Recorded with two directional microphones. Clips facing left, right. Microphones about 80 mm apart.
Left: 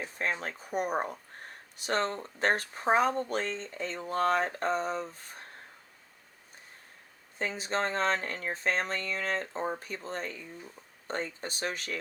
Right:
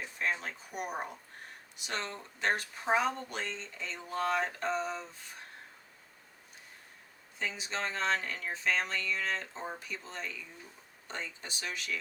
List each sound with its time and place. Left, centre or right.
0.0 s speech: left
7.3 s speech: left